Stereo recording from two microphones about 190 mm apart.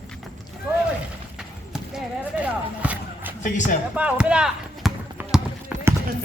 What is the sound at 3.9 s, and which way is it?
Basketball bounce, 5° right (ahead or behind).